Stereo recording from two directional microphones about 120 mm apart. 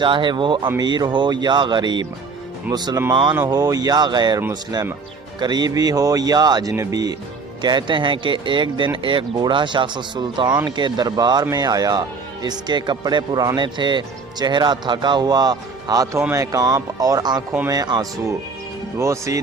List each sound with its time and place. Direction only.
0.0 s speech: 45° right (ahead or behind)
5.4 s speech: 35° right (ahead or behind)